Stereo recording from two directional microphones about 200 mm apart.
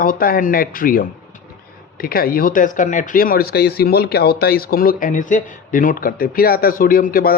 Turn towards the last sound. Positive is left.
turn(degrees=45)  # may be behind; listen again after turning